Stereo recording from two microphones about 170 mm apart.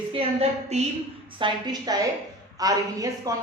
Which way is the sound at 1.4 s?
25° right (ahead or behind).